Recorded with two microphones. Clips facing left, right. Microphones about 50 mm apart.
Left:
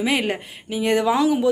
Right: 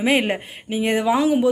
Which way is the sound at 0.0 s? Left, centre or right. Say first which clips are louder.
Right 3 dB; right.